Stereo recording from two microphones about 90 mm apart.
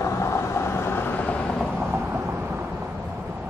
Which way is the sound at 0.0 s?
35° left (ahead or behind).